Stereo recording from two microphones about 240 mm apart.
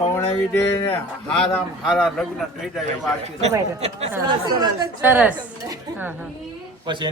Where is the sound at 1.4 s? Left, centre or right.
Centre.